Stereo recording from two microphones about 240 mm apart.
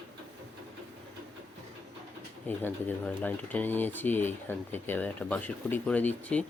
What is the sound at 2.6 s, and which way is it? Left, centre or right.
Speech, centre.